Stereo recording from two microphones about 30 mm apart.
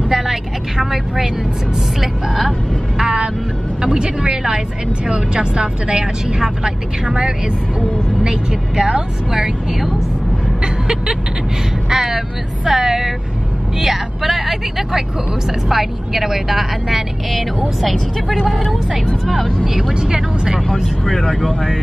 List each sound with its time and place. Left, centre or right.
0.1 s vehicle: centre
3.8 s speech: right
8.2 s speech: right
10.6 s vehicle: right
11.9 s speech: centre
19.9 s speech: right
20.2 s speech: centre
21.0 s speech: centre